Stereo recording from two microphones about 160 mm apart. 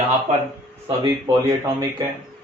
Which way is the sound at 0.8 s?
35° right (ahead or behind).